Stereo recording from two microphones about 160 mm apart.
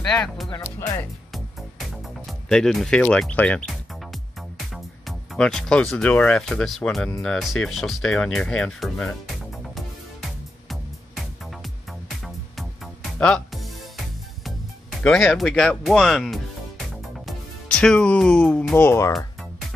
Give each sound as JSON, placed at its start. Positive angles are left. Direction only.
{"t": 0.0, "sound": "speech", "side_deg": 5}
{"t": 0.5, "sound": "speech", "side_deg": 20}
{"t": 2.2, "sound": "speech", "side_deg": 5}
{"t": 10.7, "sound": "music", "side_deg": 0}
{"t": 17.3, "sound": "speech", "side_deg": 5}